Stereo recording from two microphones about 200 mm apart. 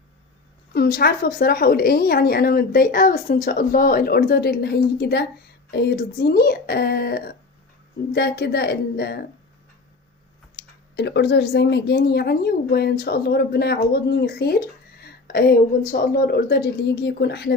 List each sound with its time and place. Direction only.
0.7 s speech: 50° left (ahead or behind)
10.5 s speech: 55° left (ahead or behind)